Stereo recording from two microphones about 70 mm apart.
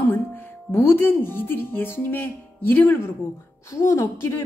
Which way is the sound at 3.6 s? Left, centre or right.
Left.